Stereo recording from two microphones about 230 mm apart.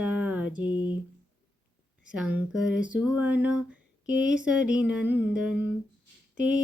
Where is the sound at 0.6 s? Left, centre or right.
Centre.